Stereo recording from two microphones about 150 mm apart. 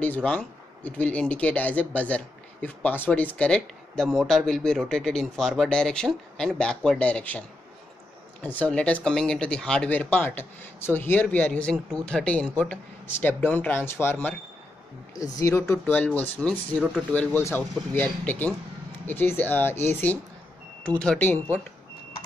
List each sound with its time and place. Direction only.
0.0 s speech: 10° left (ahead or behind)
15.7 s speech: 10° left (ahead or behind)